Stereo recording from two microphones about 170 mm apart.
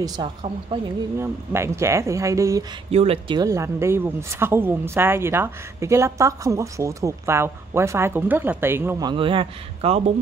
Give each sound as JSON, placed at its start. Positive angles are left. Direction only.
{"t": 0.0, "sound": "a woman's voice", "side_deg": -25}
{"t": 1.1, "sound": "a woman's voice", "side_deg": -15}
{"t": 2.9, "sound": "speech", "side_deg": -35}
{"t": 3.3, "sound": "a woman's voice", "side_deg": -20}
{"t": 9.1, "sound": "speech", "side_deg": -30}